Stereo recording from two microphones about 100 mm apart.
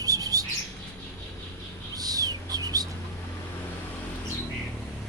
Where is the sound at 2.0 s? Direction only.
40° right (ahead or behind).